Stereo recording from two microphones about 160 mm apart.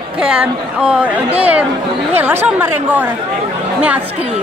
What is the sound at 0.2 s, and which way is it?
A woman's voice, 5° right (ahead or behind).